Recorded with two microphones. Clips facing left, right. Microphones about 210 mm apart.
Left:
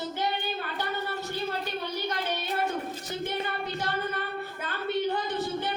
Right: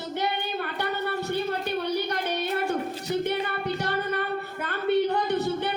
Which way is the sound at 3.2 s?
60° right (ahead or behind).